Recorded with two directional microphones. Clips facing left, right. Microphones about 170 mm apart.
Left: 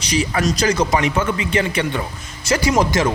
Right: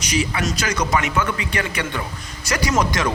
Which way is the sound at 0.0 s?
35° left (ahead or behind).